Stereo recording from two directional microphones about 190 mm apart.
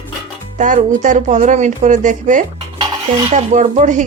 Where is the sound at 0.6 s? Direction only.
40° right (ahead or behind).